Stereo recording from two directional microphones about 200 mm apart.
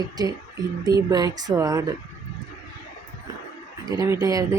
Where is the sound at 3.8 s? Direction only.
20° right (ahead or behind).